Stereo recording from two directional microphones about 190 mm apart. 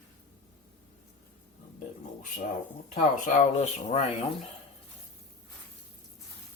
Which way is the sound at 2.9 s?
45° left (ahead or behind).